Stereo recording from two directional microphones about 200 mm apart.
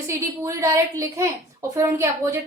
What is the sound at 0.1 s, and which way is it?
A woman's voice, 15° right (ahead or behind).